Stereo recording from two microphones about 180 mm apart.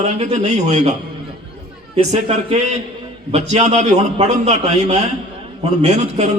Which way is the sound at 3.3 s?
40° right (ahead or behind).